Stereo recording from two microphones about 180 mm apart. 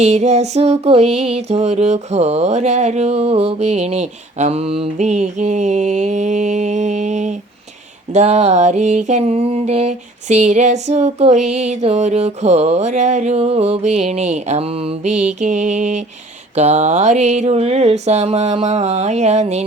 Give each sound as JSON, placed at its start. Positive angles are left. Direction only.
{"t": 0.0, "sound": "music", "side_deg": -40}